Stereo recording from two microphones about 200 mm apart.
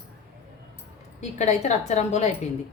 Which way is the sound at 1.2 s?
35° left (ahead or behind).